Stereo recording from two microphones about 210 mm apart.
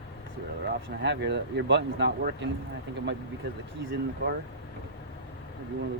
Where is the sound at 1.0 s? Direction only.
55° right (ahead or behind).